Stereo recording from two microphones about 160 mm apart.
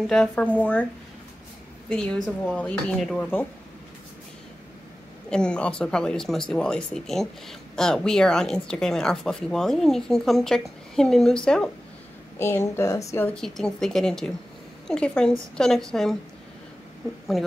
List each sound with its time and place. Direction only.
0.0 s speech: 5° left (ahead or behind)
1.9 s speech: 5° left (ahead or behind)
5.3 s speech: 5° left (ahead or behind)
12.4 s speech: 15° left (ahead or behind)
13.1 s speech: 10° left (ahead or behind)